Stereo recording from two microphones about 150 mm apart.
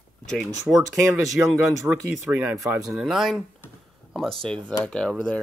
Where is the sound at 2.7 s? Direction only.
5° right (ahead or behind).